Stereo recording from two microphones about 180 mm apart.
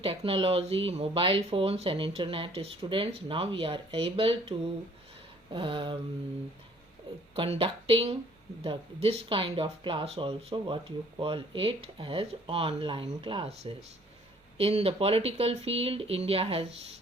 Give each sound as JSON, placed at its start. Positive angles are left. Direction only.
{"t": 0.0, "sound": "speech", "side_deg": -30}
{"t": 7.3, "sound": "speech", "side_deg": -30}